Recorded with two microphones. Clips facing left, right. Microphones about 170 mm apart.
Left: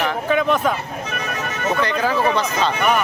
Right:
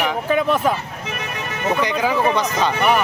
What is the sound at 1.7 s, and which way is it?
Speech, 15° right (ahead or behind).